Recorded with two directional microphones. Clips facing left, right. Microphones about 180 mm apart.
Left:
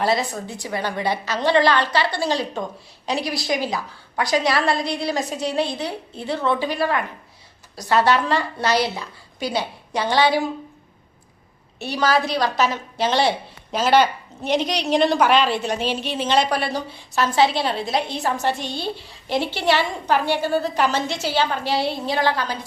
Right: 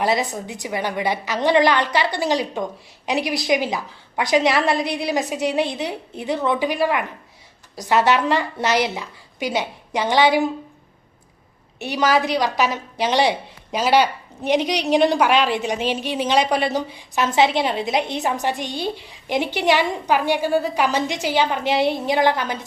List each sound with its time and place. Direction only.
0.0 s a woman's voice: 15° right (ahead or behind)
11.8 s a woman's voice: 15° right (ahead or behind)